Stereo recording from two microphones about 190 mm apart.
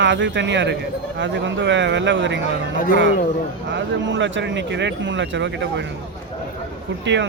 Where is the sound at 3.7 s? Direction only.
70° right (ahead or behind).